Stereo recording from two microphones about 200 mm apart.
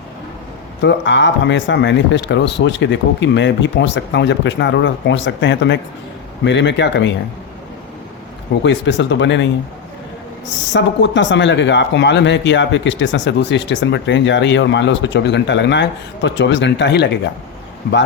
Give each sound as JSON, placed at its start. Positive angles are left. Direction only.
{"t": 0.8, "sound": "speech", "side_deg": 60}
{"t": 8.6, "sound": "speech", "side_deg": 65}
{"t": 10.7, "sound": "speech", "side_deg": 65}